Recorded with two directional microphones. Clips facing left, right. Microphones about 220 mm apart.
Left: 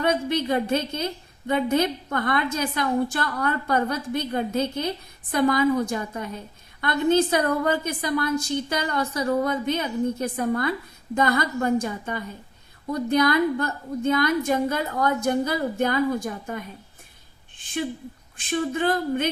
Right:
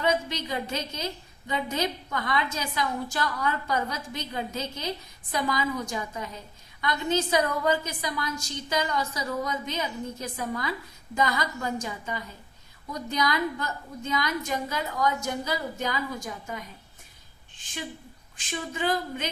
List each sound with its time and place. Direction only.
0.0 s a woman's voice: 55° left (ahead or behind)
18.3 s a woman's voice: 55° left (ahead or behind)